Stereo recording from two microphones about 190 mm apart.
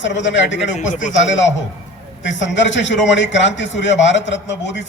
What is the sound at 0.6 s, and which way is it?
Speech, 40° left (ahead or behind).